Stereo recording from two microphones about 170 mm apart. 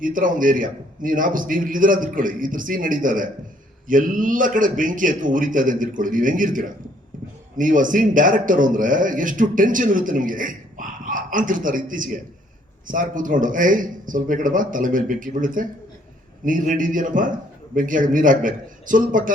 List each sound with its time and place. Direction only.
0.0 s a man's voice: 50° right (ahead or behind)